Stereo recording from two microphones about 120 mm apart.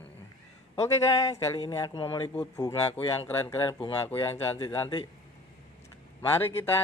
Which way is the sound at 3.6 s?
45° left (ahead or behind).